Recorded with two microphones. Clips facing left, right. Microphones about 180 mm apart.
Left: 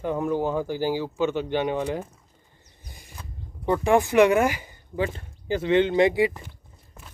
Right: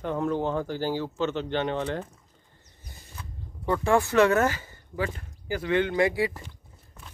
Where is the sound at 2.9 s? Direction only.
15° left (ahead or behind).